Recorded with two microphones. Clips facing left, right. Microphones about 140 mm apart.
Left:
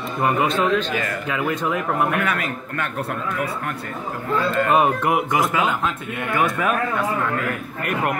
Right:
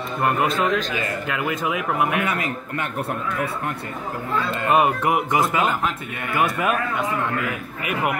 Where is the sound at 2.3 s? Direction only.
20° right (ahead or behind).